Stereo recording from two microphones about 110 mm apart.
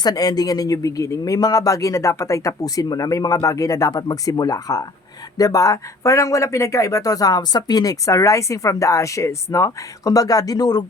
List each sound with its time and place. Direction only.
0.0 s speech: 35° left (ahead or behind)